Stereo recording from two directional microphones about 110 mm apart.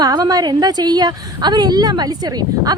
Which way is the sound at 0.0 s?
35° right (ahead or behind).